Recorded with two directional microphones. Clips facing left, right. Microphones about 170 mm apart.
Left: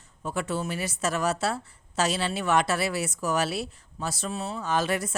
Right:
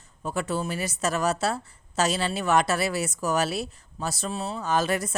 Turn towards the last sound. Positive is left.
turn(degrees=-40)  # may be behind; listen again after turning